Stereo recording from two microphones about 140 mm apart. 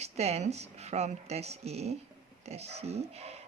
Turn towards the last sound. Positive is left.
turn(degrees=-50)  # may be behind; listen again after turning